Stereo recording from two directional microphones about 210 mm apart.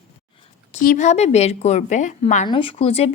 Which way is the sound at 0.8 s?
35° left (ahead or behind).